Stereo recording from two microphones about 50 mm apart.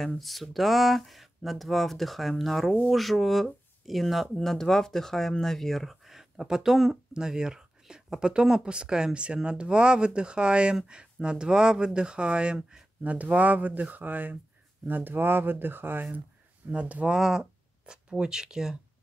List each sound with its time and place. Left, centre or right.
0.2 s speech: centre; by 16.1 s right
16.7 s speech: right
17.1 s speech: centre